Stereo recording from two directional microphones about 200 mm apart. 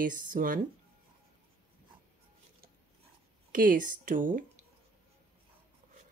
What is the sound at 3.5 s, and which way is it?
Speech, 45° right (ahead or behind).